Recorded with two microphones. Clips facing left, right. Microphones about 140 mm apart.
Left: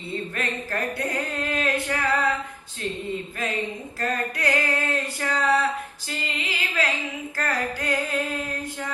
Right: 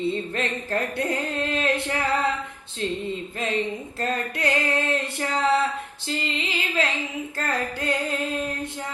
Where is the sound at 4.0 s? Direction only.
25° right (ahead or behind).